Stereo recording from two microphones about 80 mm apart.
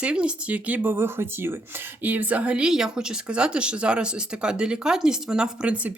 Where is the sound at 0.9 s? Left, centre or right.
Right.